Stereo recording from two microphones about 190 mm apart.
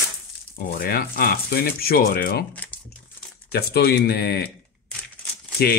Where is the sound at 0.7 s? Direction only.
50° left (ahead or behind).